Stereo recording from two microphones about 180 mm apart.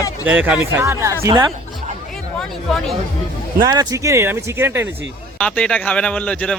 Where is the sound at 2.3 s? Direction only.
Centre (ahead or behind).